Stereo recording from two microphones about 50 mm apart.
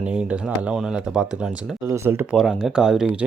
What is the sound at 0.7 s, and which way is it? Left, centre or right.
Speech, centre.